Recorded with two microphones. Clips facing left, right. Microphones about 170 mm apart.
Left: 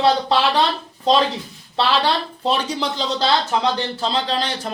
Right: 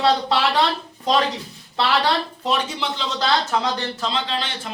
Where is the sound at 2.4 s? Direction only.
35° left (ahead or behind).